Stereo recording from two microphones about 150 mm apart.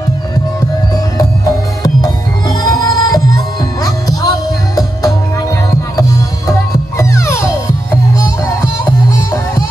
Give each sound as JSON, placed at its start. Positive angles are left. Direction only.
{"t": 0.6, "sound": "music", "side_deg": 20}